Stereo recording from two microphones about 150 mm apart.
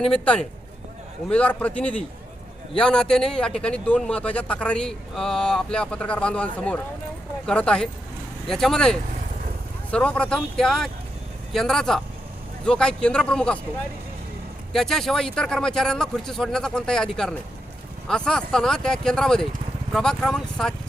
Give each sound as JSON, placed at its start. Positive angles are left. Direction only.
{"t": 1.3, "sound": "a man's voice", "side_deg": 10}
{"t": 14.7, "sound": "speech", "side_deg": 0}